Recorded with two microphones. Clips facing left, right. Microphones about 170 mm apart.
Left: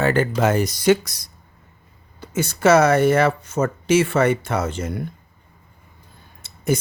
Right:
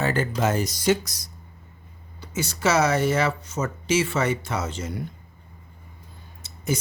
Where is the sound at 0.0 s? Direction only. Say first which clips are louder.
Left 5 dB; 65° left (ahead or behind).